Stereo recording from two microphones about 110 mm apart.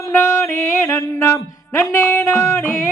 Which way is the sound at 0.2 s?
20° left (ahead or behind).